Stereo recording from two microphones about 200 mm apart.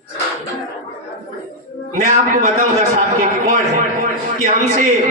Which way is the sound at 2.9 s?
40° right (ahead or behind).